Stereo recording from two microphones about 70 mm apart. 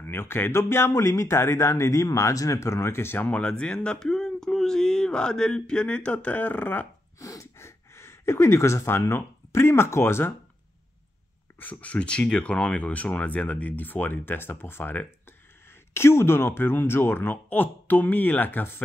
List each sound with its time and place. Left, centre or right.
0.0 s speech: left
3.3 s speech: centre
7.2 s gasp: left
11.6 s speech: centre